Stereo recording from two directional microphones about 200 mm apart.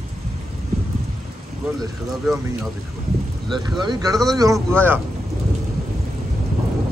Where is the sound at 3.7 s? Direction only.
20° right (ahead or behind).